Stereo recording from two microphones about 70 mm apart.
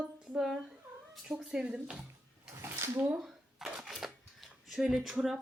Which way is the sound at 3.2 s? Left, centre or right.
Centre.